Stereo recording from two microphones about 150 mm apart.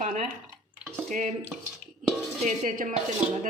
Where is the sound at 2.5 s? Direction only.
65° right (ahead or behind).